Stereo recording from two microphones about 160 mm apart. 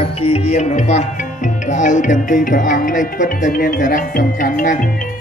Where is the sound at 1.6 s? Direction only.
50° left (ahead or behind).